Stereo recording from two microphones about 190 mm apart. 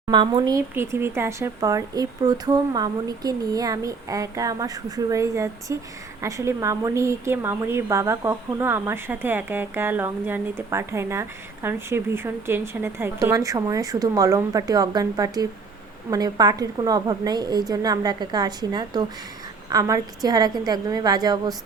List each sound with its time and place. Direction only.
0.1 s a woman's voice: 25° right (ahead or behind)